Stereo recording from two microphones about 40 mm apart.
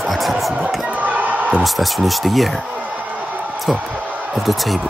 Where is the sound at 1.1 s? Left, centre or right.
Right.